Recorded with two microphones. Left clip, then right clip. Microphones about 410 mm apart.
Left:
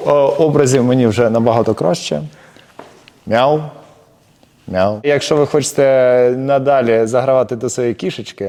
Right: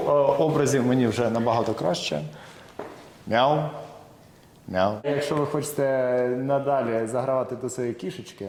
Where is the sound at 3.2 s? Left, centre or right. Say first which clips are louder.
Left 8 dB; left.